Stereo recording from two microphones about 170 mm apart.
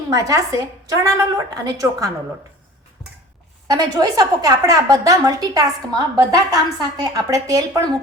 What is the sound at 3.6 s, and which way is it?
A woman's voice, 20° right (ahead or behind).